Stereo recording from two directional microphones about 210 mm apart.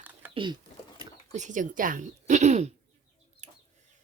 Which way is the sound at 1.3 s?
35° right (ahead or behind).